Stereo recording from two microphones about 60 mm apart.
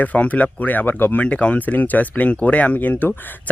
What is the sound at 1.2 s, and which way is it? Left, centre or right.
Speech, left.